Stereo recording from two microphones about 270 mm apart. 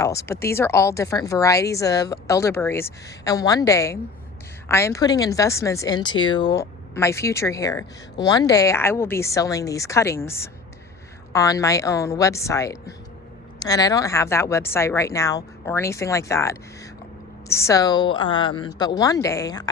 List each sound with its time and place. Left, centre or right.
0.0 s a woman's voice: centre